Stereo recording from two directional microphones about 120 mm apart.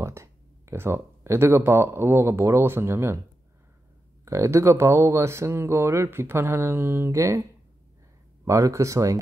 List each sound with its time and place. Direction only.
0.0 s speech: 25° right (ahead or behind)
4.2 s speech: 25° right (ahead or behind)
8.5 s speech: 25° right (ahead or behind)